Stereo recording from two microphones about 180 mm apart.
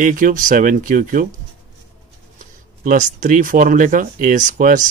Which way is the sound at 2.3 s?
45° right (ahead or behind).